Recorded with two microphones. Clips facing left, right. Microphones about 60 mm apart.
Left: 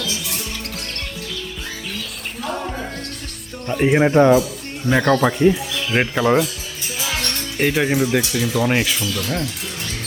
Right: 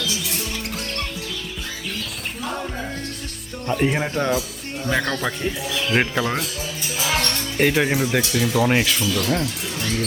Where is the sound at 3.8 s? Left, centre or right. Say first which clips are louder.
Left 9 dB; centre.